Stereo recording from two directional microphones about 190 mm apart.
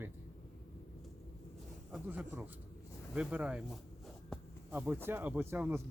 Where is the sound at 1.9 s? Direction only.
5° right (ahead or behind).